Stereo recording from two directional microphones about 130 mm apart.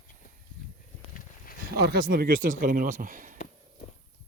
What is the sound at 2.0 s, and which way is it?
Speech, 90° right.